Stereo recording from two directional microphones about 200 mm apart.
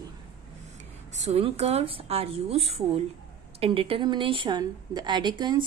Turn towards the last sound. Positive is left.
turn(degrees=-20)  # may be behind; listen again after turning